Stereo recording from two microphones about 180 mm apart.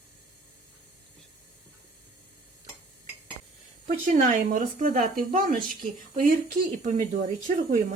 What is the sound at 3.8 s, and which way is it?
Speech, 45° right (ahead or behind).